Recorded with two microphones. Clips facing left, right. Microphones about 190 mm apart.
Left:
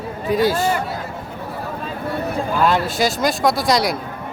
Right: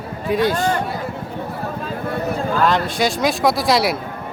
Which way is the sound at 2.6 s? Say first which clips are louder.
Left 1 dB; 5° left (ahead or behind).